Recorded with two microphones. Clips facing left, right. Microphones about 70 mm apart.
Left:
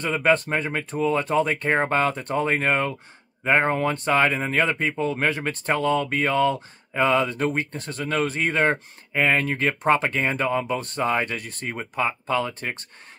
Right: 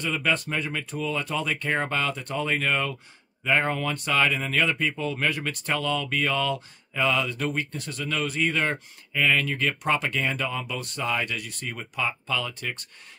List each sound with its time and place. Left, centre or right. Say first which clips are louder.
0.0 s speech: left 6 dB; left